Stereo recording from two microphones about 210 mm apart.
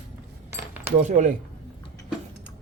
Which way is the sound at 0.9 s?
35° right (ahead or behind).